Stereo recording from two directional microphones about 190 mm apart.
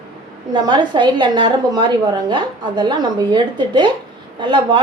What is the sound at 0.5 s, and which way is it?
Speech, 25° right (ahead or behind).